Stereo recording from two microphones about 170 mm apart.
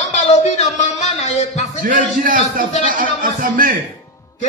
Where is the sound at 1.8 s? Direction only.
55° right (ahead or behind).